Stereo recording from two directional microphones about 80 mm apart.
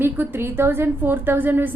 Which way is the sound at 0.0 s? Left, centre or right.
Right.